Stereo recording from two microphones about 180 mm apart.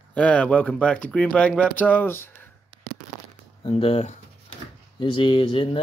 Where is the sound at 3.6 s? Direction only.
35° left (ahead or behind).